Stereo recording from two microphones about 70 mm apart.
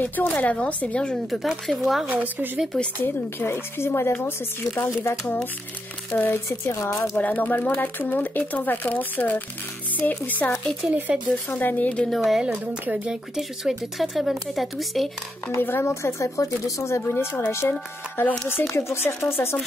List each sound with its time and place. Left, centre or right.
0.0 s speech: left
1.3 s speech: centre
2.0 s speech: right
3.0 s speech: left
6.1 s speech: left
6.7 s speech: left
7.2 s speech: left
10.9 s speech: right
11.5 s speech: left
12.0 s speech: centre
15.6 s speech: left
17.1 s speech: left